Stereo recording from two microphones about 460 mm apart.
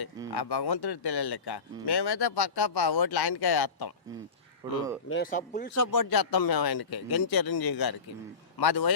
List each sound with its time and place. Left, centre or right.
0.3 s speech: left
4.6 s speech: centre
5.0 s speech: left
5.7 s speech: left